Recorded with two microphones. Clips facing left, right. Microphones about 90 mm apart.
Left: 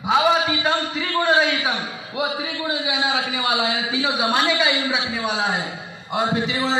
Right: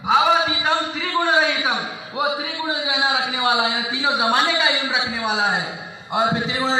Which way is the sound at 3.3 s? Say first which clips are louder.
Right 2 dB; 20° right (ahead or behind).